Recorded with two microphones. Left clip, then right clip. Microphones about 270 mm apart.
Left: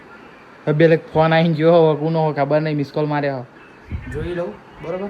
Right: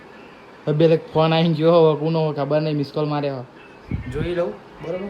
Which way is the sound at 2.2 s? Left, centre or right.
Centre.